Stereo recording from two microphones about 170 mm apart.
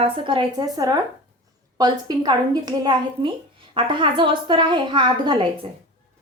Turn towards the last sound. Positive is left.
turn(degrees=-25)  # may be behind; listen again after turning